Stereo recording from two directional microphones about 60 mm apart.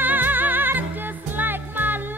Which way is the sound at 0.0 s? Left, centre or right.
Right.